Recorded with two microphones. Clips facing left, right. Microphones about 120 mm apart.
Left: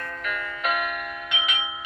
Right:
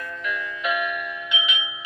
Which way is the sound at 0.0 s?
50° left (ahead or behind).